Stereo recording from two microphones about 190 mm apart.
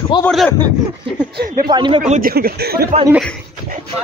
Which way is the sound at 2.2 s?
50° right (ahead or behind).